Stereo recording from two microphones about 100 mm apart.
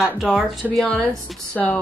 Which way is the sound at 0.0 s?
5° right (ahead or behind).